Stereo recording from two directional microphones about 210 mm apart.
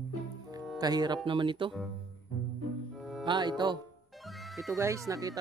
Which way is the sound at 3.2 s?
20° right (ahead or behind).